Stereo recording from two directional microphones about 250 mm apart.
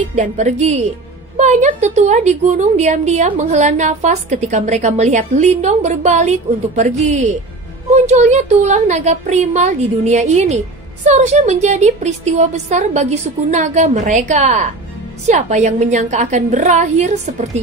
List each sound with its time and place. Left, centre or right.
0.1 s a woman's voice: right